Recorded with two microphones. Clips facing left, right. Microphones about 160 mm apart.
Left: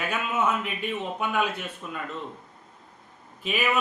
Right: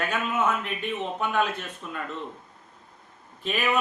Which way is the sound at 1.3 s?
5° left (ahead or behind).